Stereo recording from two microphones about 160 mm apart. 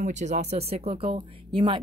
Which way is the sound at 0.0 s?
45° right (ahead or behind).